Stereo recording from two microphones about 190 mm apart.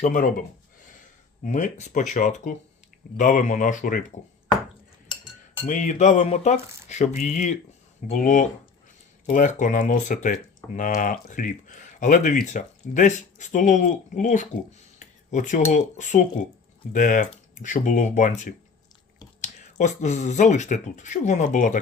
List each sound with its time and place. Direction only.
0.0 s speech: 45° left (ahead or behind)
1.5 s speech: 40° left (ahead or behind)
5.6 s speech: 40° left (ahead or behind)
19.8 s speech: 40° left (ahead or behind)